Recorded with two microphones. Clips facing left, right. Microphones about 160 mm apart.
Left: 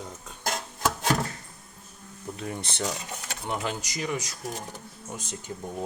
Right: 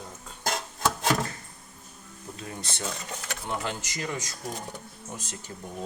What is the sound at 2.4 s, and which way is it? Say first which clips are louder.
Speech: left 4 dB; 20° left (ahead or behind).